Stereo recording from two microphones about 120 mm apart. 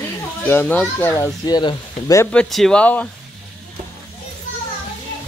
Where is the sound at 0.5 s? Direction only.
15° left (ahead or behind); by 2.1 s 35° left (ahead or behind).